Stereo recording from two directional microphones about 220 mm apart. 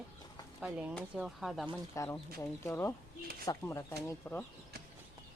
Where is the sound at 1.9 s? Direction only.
15° left (ahead or behind).